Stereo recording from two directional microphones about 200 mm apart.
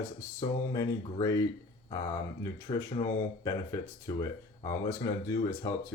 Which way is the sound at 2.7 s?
20° left (ahead or behind).